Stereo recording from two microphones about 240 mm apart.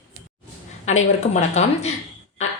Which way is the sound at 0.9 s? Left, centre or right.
Left.